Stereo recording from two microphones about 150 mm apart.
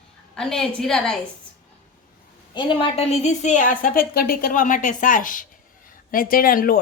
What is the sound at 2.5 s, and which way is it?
A woman's voice, 35° left (ahead or behind).